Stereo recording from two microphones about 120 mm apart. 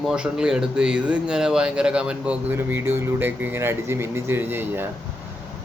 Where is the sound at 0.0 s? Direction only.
5° right (ahead or behind).